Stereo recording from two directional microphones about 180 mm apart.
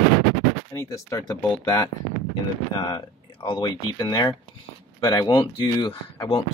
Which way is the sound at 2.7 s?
25° left (ahead or behind).